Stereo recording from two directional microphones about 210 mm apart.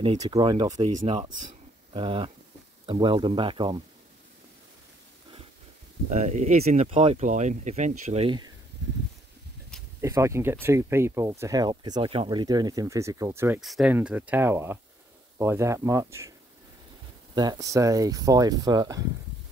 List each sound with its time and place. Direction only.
0.0 s speech: 25° right (ahead or behind)
6.0 s speech: 35° right (ahead or behind)
10.0 s speech: 15° right (ahead or behind)
17.4 s speech: 20° right (ahead or behind)